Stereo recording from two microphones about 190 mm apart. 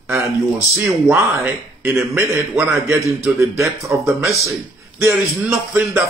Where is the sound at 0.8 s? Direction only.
5° right (ahead or behind).